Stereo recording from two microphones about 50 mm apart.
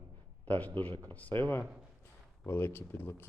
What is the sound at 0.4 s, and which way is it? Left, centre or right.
Speech, left.